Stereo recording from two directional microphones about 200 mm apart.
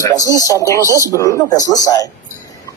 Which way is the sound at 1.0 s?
15° left (ahead or behind).